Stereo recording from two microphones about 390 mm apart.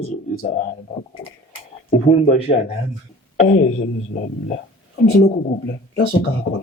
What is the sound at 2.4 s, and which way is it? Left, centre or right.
Speech, centre.